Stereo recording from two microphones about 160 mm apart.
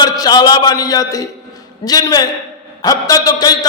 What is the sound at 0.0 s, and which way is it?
A man's voice, 25° left (ahead or behind).